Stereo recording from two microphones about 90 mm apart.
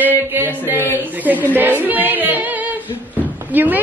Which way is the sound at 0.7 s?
25° left (ahead or behind).